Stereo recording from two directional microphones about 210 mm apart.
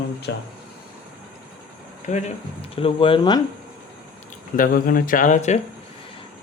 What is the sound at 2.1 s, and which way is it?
Speech, 35° left (ahead or behind).